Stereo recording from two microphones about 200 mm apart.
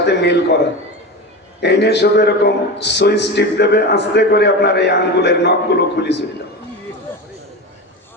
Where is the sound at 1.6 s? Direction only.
55° left (ahead or behind).